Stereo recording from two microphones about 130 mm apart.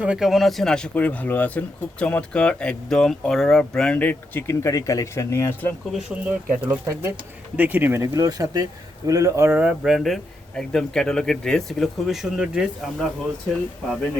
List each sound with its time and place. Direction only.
0.0 s speech: 5° right (ahead or behind); by 5.7 s 20° left (ahead or behind)
5.9 s a man's voice: 5° right (ahead or behind)